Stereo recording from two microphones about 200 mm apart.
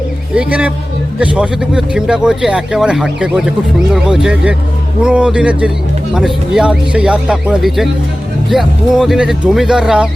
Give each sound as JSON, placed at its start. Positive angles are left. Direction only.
{"t": 0.3, "sound": "speech", "side_deg": -5}